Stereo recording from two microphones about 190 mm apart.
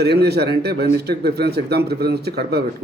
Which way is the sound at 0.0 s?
60° right (ahead or behind).